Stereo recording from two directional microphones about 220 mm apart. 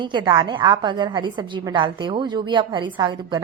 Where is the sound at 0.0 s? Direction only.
20° right (ahead or behind).